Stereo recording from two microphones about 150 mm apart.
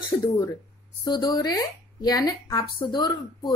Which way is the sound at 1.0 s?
30° left (ahead or behind).